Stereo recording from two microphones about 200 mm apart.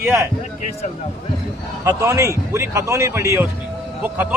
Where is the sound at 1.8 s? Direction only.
15° right (ahead or behind).